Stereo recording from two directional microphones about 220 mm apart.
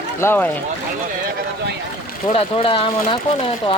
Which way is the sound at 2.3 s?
25° left (ahead or behind).